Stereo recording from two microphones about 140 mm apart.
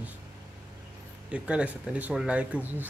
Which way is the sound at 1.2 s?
10° right (ahead or behind).